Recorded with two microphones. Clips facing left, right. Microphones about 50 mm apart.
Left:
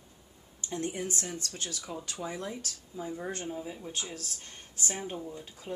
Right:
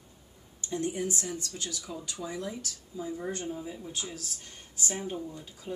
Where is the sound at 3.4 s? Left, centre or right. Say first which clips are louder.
Right 1 dB; centre.